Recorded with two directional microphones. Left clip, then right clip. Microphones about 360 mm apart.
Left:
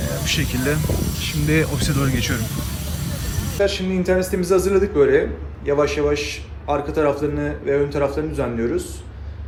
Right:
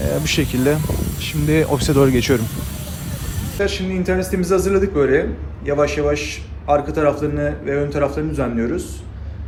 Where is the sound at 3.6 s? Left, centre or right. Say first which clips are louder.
Left 1 dB; centre.